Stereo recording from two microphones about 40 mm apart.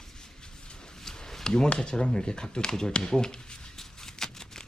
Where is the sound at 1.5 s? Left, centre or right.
Left.